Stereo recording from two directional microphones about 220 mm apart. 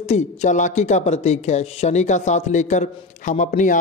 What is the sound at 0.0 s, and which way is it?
Speech, 30° left (ahead or behind).